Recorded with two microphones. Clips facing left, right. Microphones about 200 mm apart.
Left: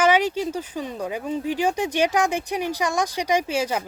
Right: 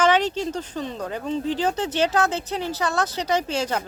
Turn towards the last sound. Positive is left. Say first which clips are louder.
# left 1 dB
turn(degrees=10)  # may be behind; listen again after turning